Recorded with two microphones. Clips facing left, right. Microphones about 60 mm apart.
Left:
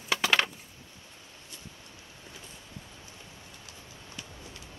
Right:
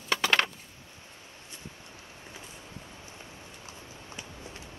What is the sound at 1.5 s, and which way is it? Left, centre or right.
Boat, right.